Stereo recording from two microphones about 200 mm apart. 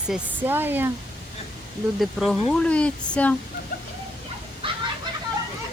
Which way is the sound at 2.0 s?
Centre (ahead or behind).